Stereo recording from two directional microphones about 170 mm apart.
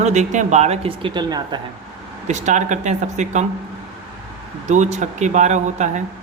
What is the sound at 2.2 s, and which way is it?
Speech, 45° right (ahead or behind).